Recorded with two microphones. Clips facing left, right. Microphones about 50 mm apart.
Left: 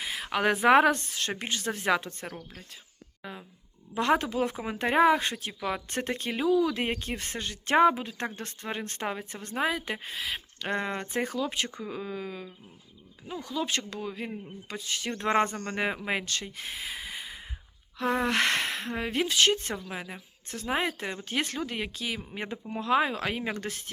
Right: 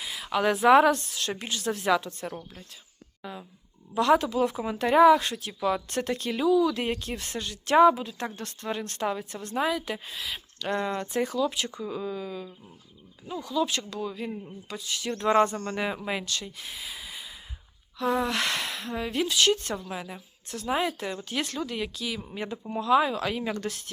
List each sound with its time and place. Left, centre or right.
0.0 s speech: left